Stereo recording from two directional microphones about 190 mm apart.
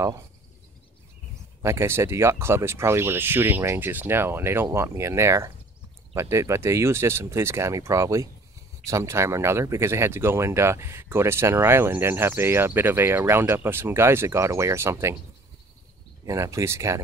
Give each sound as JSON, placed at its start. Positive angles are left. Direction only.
{"t": 1.6, "sound": "speech", "side_deg": -15}
{"t": 16.3, "sound": "speech", "side_deg": -15}